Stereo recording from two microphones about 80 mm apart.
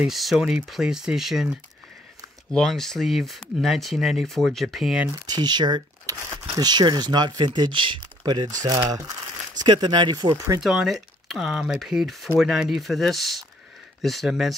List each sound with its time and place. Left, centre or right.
0.0 s speech: centre
2.5 s speech: centre
5.2 s speech: right
8.2 s speech: right
9.6 s speech: right
10.3 s speech: right
10.6 s speech: centre